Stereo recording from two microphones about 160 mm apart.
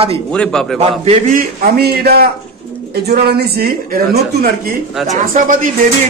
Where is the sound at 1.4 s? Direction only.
70° right (ahead or behind).